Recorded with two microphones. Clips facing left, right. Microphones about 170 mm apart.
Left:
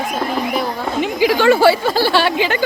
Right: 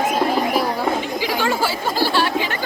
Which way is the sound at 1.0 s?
70° left (ahead or behind).